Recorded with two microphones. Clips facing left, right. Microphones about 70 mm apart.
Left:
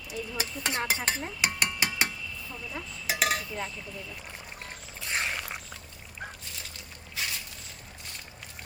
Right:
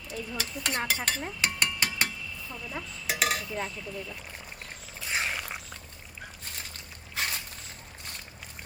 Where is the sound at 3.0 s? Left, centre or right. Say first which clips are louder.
Left 1 dB; centre.